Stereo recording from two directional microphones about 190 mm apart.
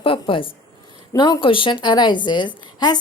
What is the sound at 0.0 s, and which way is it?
A woman's voice, 30° left (ahead or behind).